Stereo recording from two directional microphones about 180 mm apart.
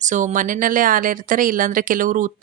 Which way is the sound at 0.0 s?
45° right (ahead or behind).